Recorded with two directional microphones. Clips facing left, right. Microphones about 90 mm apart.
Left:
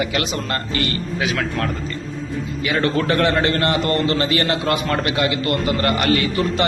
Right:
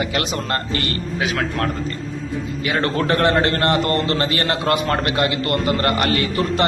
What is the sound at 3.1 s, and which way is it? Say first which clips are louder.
A man's voice: right 3 dB; 50° right (ahead or behind).